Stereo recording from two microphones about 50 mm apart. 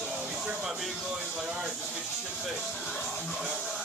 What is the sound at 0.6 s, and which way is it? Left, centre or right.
Speech, centre.